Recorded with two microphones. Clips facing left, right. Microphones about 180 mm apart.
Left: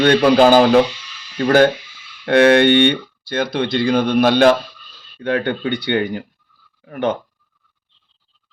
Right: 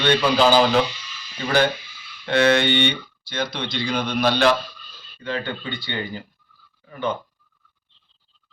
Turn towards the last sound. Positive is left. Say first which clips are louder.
# left 6 dB
turn(degrees=75)  # may be behind; listen again after turning